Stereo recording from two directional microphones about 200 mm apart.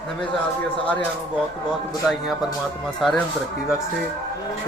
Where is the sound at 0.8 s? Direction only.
5° left (ahead or behind).